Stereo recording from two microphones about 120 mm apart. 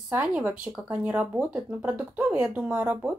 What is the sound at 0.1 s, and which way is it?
Speech, 15° right (ahead or behind).